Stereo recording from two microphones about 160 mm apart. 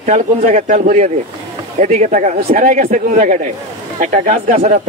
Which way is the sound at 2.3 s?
65° right (ahead or behind).